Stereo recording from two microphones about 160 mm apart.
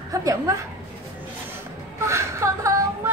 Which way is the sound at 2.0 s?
15° right (ahead or behind).